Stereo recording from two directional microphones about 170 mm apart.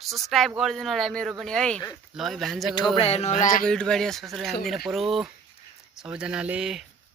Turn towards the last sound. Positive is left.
turn(degrees=-5)  # may be behind; listen again after turning